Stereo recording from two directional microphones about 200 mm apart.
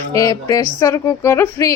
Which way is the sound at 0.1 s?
15° left (ahead or behind).